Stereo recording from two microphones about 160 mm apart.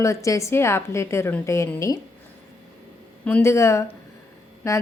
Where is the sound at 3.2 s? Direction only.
15° left (ahead or behind).